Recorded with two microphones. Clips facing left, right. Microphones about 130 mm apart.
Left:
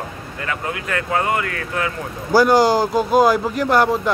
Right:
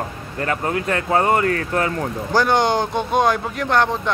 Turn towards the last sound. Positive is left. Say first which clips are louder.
# left 3 dB
turn(degrees=5)  # may be behind; listen again after turning